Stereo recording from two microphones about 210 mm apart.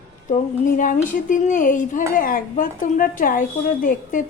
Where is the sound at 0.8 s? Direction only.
40° left (ahead or behind).